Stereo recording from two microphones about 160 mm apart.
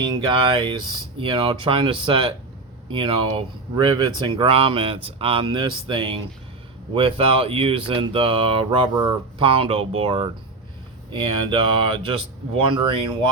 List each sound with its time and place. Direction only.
0.1 s speech: 30° right (ahead or behind)